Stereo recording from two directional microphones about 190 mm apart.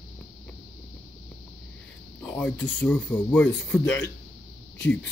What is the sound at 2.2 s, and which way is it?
Speech, 5° left (ahead or behind).